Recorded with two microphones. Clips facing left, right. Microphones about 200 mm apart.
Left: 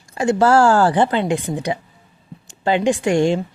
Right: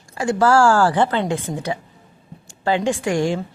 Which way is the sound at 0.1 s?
25° left (ahead or behind).